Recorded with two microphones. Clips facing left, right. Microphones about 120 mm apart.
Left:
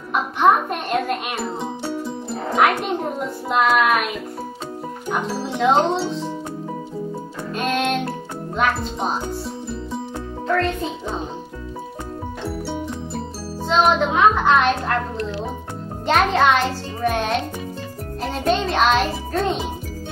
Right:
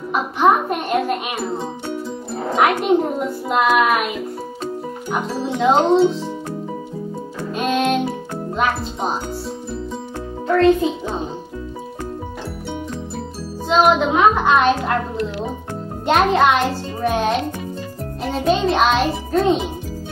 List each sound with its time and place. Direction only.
0.1 s music: 5° right (ahead or behind)
2.5 s music: 5° right (ahead or behind)
5.1 s speech: centre (ahead or behind)
7.5 s music: centre (ahead or behind)
8.5 s speech: centre (ahead or behind)
10.5 s music: centre (ahead or behind)
13.7 s music: 5° right (ahead or behind)
18.2 s a child's voice: centre (ahead or behind)